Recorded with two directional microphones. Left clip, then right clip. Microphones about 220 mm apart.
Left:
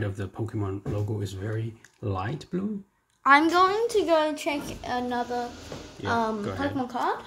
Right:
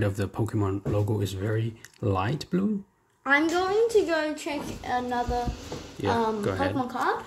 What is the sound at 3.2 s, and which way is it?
A woman's voice, 40° left (ahead or behind).